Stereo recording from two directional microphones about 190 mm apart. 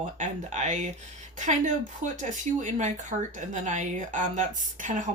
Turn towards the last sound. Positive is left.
turn(degrees=-40)  # may be behind; listen again after turning